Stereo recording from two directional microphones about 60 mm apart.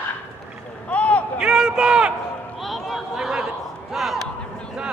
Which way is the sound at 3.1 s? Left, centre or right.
Centre.